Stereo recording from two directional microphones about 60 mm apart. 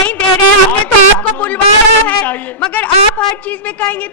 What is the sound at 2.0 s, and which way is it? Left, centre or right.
A man's voice, left.